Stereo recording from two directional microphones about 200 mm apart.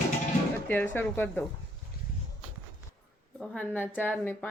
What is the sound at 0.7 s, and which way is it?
Speech, 10° left (ahead or behind).